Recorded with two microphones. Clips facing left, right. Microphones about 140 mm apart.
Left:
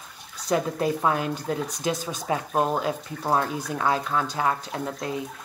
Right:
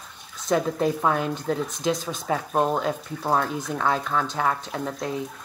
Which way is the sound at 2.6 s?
Centre (ahead or behind).